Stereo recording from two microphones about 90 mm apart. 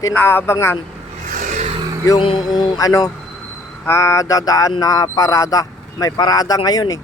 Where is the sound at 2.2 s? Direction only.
80° left.